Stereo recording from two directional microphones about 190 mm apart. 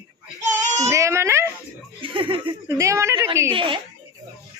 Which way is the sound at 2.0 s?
25° right (ahead or behind).